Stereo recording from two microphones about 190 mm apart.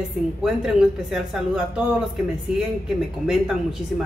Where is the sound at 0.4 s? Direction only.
5° right (ahead or behind).